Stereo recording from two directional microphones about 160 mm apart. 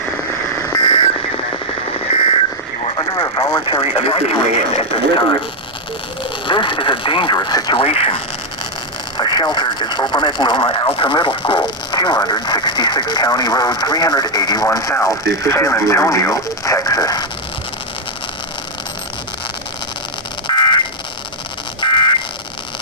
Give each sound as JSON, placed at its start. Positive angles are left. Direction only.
{"t": 0.9, "sound": "a sound", "side_deg": 35}
{"t": 3.0, "sound": "speech", "side_deg": 25}
{"t": 6.5, "sound": "speech", "side_deg": 30}
{"t": 20.5, "sound": "fire alarm", "side_deg": 30}
{"t": 21.8, "sound": "buzzer", "side_deg": 30}